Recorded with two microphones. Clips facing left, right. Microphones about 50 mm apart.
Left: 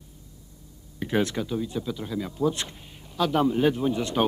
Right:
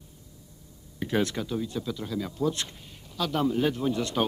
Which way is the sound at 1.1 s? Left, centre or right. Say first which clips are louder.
Left 2 dB; centre.